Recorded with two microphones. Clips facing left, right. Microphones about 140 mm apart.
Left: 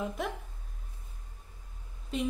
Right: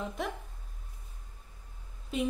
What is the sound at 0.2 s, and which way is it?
Speech, centre (ahead or behind).